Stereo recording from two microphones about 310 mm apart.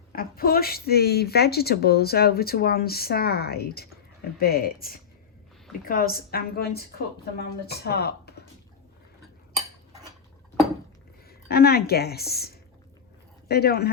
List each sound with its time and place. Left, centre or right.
0.1 s a woman's voice: left
11.3 s a woman's voice: left